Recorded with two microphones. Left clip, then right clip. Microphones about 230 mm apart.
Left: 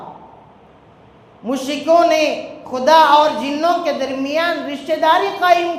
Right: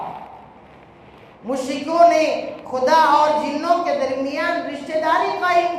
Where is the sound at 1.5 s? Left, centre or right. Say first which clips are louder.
Left 7 dB; left.